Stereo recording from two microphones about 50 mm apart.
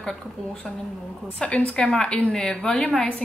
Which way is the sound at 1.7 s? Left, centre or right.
Centre.